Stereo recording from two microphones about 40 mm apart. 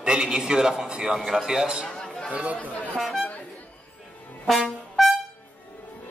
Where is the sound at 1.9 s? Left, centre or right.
Centre.